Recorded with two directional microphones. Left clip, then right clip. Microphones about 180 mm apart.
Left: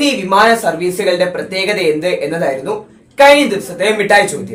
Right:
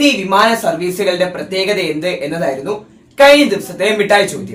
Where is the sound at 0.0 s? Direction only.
15° right (ahead or behind).